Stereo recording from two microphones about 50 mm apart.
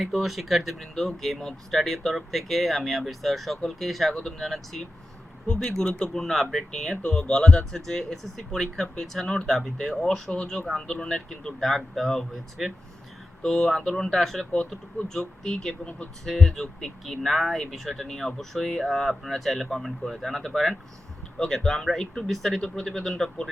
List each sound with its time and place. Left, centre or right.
0.0 s speech: centre
4.1 s speech: centre
10.3 s speech: centre
11.6 s speech: centre